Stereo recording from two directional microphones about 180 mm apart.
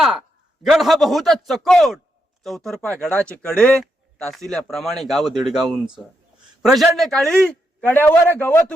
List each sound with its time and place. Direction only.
0.6 s speech: centre (ahead or behind)